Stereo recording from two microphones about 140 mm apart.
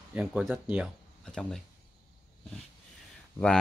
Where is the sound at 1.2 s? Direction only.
5° left (ahead or behind).